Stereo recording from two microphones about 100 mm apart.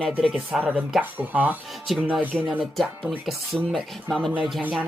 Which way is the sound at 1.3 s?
15° right (ahead or behind).